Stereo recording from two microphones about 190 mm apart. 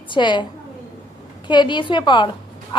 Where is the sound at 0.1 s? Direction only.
25° left (ahead or behind).